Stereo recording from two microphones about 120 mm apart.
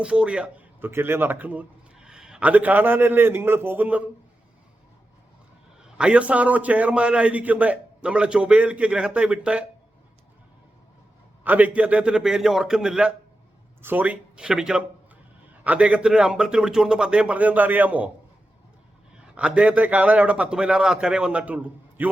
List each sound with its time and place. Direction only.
0.0 s a man's voice: 10° right (ahead or behind)
5.8 s a man's voice: 10° right (ahead or behind)
11.4 s a man's voice: 10° right (ahead or behind)
19.1 s a man's voice: 10° right (ahead or behind)